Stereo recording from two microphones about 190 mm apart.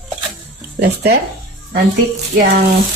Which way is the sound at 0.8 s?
55° right (ahead or behind).